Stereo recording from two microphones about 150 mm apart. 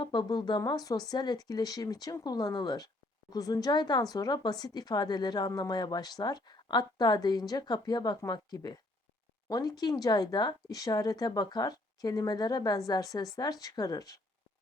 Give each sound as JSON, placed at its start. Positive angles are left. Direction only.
{"t": 0.0, "sound": "speech", "side_deg": 30}